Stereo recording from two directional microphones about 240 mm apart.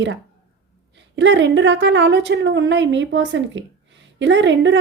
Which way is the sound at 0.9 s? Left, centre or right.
Right.